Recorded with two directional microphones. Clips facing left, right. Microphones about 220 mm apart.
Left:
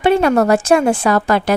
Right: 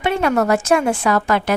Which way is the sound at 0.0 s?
35° left (ahead or behind).